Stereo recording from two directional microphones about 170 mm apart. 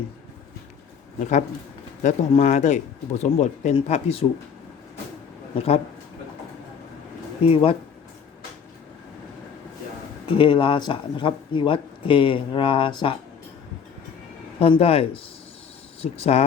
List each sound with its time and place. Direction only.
1.2 s speech: 45° left (ahead or behind)
5.5 s speech: 35° left (ahead or behind)
7.4 s speech: 35° left (ahead or behind)
10.2 s speech: 30° left (ahead or behind)
14.6 s speech: 35° left (ahead or behind)